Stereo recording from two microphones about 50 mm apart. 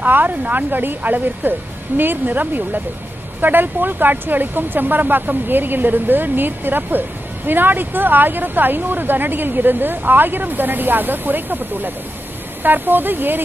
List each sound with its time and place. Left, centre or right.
0.0 s speech: right